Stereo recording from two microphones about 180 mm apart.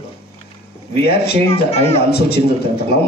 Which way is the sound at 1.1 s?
65° left (ahead or behind).